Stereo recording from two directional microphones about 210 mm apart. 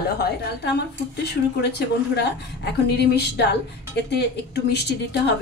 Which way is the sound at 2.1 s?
50° left (ahead or behind).